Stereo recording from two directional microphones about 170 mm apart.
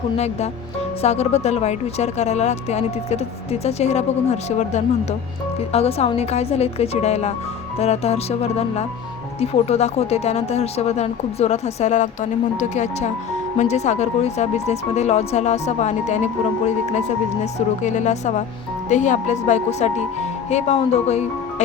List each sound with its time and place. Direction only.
0.2 s speech: 40° left (ahead or behind)
17.4 s speech: 45° left (ahead or behind)